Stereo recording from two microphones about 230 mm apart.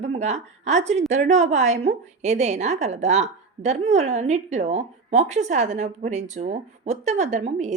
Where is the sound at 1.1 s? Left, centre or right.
Right.